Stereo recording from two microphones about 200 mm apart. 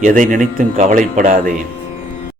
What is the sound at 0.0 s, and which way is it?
Speech, 40° right (ahead or behind).